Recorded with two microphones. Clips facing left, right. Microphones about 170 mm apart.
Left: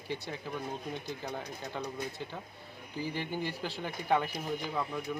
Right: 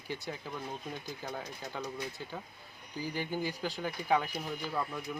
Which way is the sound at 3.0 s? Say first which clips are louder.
Even; centre (ahead or behind).